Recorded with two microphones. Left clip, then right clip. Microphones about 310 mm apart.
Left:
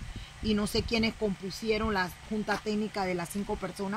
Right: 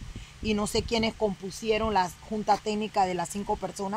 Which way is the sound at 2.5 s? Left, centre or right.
Centre.